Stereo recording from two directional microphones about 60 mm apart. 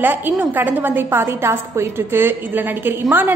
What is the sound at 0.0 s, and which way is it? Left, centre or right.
A woman's voice, right.